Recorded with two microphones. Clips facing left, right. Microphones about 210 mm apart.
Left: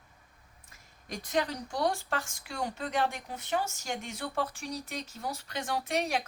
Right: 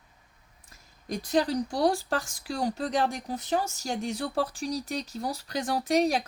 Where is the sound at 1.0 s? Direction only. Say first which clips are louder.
Right 5 dB; 35° right (ahead or behind).